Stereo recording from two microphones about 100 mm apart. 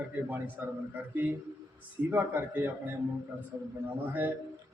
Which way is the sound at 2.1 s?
20° right (ahead or behind).